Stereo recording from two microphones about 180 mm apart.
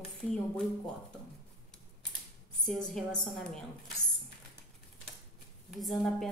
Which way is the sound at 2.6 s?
5° left (ahead or behind).